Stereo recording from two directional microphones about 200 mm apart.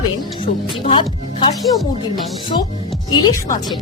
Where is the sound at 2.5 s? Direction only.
25° left (ahead or behind).